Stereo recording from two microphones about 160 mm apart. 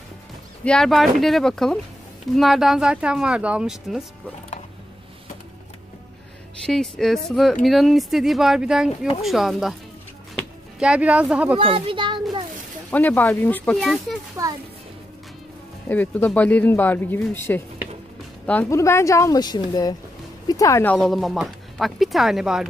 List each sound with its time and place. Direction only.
0.7 s speech: 5° left (ahead or behind)
6.6 s speech: 5° left (ahead or behind)
10.8 s a woman's voice: 5° right (ahead or behind)
11.5 s a sound: 35° right (ahead or behind)
12.9 s speech: 10° left (ahead or behind)
14.4 s speech: 20° right (ahead or behind)
15.9 s speech: 10° left (ahead or behind)